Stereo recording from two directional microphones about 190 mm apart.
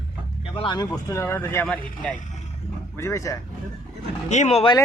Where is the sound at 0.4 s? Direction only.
30° left (ahead or behind).